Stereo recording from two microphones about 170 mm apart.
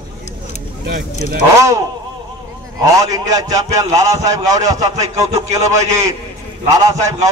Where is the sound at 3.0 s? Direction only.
20° right (ahead or behind).